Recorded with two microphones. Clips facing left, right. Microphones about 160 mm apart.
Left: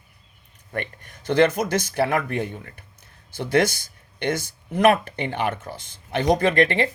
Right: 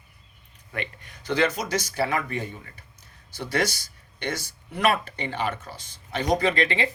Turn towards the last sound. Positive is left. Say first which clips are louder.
# left 5 dB
turn(degrees=50)  # may be behind; listen again after turning